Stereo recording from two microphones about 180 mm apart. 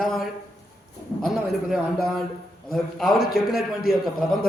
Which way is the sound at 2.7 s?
Centre (ahead or behind).